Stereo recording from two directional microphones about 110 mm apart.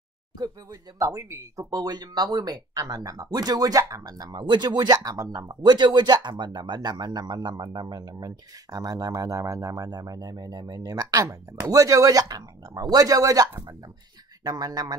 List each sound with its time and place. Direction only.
0.4 s speech: 35° right (ahead or behind)